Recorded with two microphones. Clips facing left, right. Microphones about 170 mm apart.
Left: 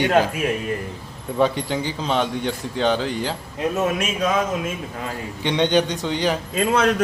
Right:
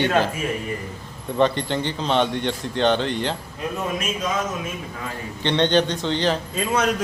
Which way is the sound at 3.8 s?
70° left (ahead or behind).